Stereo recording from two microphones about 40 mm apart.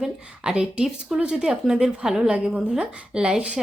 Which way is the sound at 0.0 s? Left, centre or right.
Right.